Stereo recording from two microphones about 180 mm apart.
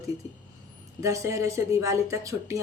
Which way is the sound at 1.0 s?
15° right (ahead or behind).